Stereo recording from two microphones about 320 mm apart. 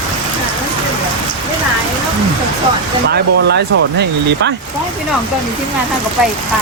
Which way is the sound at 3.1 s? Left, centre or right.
Right.